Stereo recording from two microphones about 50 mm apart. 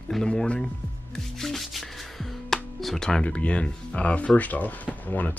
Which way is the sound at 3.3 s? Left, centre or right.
Left.